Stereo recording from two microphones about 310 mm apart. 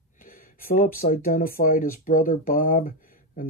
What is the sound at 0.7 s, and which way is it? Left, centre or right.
Speech, left.